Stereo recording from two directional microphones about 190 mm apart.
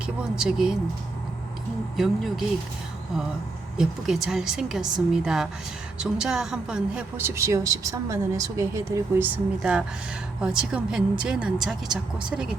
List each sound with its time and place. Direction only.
0.0 s speech: 5° right (ahead or behind)
2.0 s speech: centre (ahead or behind)
3.8 s a woman's voice: centre (ahead or behind)